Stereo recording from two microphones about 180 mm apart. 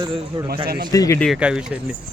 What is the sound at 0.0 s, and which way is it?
Speech, 25° right (ahead or behind).